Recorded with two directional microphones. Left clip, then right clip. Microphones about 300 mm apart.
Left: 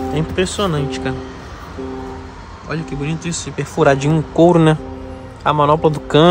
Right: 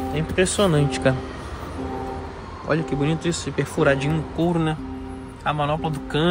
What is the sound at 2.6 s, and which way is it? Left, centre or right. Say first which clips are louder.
Speech: right 2 dB; centre.